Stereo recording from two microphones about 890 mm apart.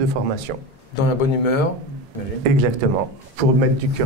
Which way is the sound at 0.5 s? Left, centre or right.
Right.